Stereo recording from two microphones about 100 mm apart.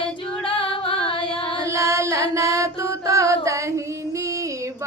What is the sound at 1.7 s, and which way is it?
Female singing, 30° right (ahead or behind).